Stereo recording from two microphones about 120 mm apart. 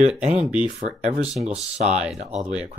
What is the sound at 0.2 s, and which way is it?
Speech, 70° right (ahead or behind).